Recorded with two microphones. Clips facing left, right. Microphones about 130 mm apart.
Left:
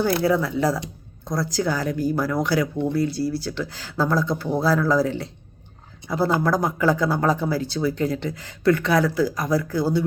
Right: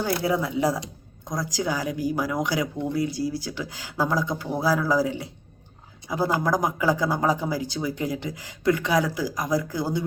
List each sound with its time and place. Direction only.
0.3 s speech: 15° right (ahead or behind)